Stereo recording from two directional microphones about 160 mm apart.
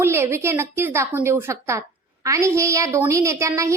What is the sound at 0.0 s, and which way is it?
A woman's voice, 15° right (ahead or behind).